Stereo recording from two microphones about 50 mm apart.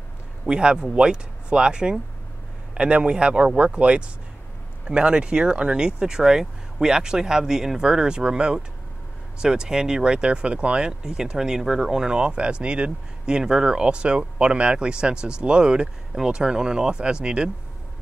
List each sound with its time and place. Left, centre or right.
0.5 s speech: centre